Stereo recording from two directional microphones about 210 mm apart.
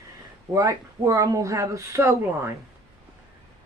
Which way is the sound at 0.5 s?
15° right (ahead or behind).